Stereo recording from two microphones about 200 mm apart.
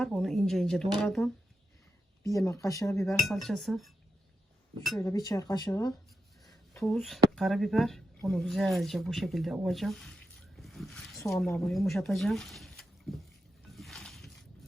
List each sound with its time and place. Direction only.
0.0 s speech: centre (ahead or behind)
2.2 s speech: 15° left (ahead or behind)
3.1 s speech: centre (ahead or behind)
4.9 s speech: 15° left (ahead or behind)
6.4 s a sound: centre (ahead or behind)
7.3 s speech: centre (ahead or behind)
10.6 s a sound: centre (ahead or behind)
11.6 s speech: centre (ahead or behind)
13.7 s a sound: centre (ahead or behind)